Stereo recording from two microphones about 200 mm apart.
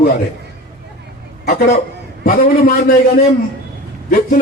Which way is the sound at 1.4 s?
45° left (ahead or behind).